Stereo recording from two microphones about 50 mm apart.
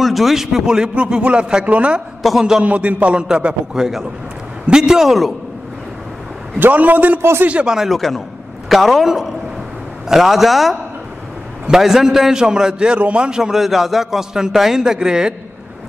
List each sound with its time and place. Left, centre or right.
0.0 s a man's voice: centre; by 3.2 s right
3.2 s a man's voice: centre
6.6 s a man's voice: right
7.2 s speech: right
7.4 s a man's voice: right
7.7 s a man's voice: centre
13.4 s a man's voice: centre